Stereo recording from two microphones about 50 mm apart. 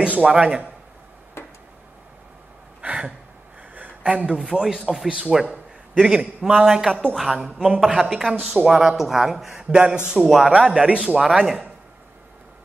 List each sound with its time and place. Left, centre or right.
0.0 s speech: right
1.4 s a sound: left
2.8 s a sound: right
4.0 s speech: right
4.4 s speech: centre
9.7 s speech: centre
10.2 s a man's voice: centre
11.2 s speech: centre